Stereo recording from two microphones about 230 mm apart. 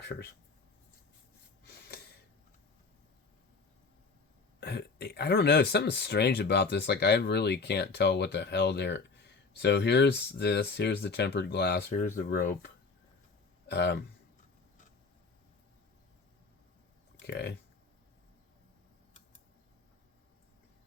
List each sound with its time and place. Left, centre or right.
4.6 s speech: left
13.7 s speech: left
17.2 s speech: left